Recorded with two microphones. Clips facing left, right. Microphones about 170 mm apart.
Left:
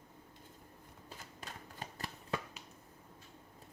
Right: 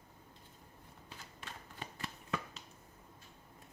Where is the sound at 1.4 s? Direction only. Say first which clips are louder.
Even; 40° left (ahead or behind).